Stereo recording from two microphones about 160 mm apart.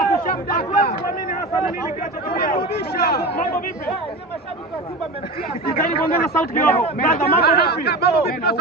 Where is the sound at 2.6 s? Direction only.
75° left (ahead or behind).